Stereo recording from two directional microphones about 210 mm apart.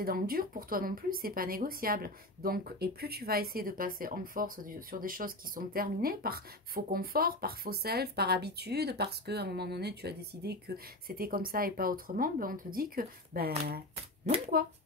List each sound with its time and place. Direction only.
0.0 s speech: 45° right (ahead or behind)
13.9 s shuffling cards: 30° right (ahead or behind)